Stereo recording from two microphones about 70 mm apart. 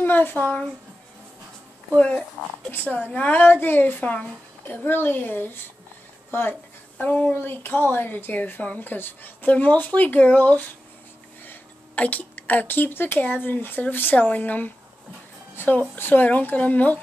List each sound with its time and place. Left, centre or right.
0.0 s a woman's voice: left
2.0 s speech: centre
7.0 s a woman's voice: centre